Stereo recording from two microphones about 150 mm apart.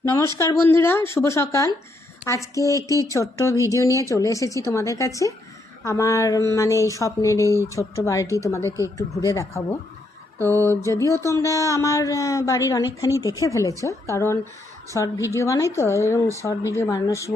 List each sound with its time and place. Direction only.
0.0 s a woman's voice: 20° left (ahead or behind)